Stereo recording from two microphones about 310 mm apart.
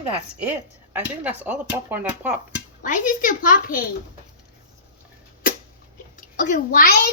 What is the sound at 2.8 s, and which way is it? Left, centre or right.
A child's voice, left.